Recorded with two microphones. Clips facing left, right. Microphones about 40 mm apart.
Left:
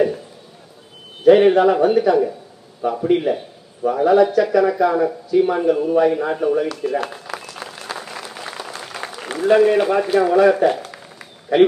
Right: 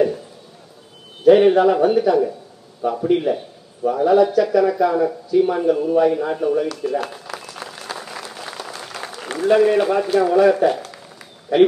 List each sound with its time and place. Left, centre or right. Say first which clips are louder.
1.2 s a man's voice: even; centre
7.4 s applause: left 1 dB; centre